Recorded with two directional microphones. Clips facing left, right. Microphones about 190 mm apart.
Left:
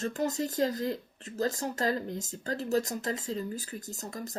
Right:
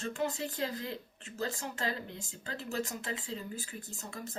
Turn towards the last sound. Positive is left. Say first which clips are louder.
# left 5 dB
turn(degrees=40)  # may be behind; listen again after turning